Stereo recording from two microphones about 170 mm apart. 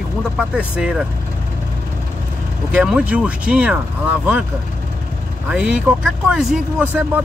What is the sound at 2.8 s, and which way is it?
Speech, 5° right (ahead or behind).